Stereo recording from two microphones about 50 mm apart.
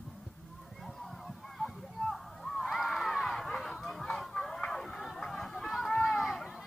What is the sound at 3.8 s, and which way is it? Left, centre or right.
Chicken, centre.